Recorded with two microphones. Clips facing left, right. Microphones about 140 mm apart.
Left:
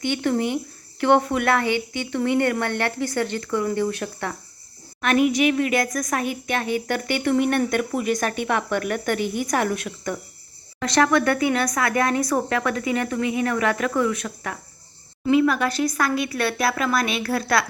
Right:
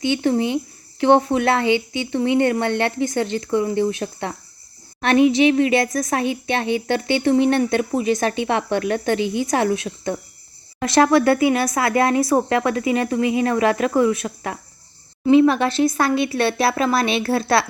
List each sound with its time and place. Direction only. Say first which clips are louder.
0.0 s speech: right 3 dB; 20° right (ahead or behind)